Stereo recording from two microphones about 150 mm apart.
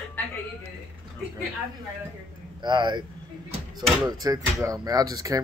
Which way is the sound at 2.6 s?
30° right (ahead or behind).